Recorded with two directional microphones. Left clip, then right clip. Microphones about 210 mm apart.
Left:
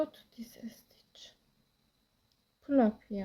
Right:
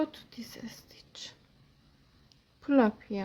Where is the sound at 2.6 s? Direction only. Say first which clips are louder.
Right 3 dB; 20° right (ahead or behind).